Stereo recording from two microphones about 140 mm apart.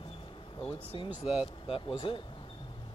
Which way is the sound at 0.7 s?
40° left (ahead or behind).